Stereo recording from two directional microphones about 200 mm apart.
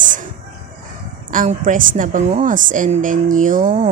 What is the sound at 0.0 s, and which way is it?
Chicken, 40° right (ahead or behind).